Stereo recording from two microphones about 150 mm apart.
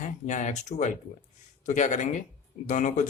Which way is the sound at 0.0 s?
55° left (ahead or behind).